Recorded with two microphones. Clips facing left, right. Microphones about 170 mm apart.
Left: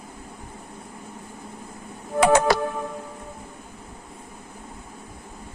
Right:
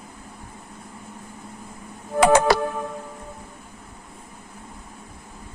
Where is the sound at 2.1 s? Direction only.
90° right.